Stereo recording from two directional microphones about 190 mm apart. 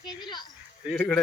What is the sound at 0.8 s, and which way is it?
Speech, centre (ahead or behind).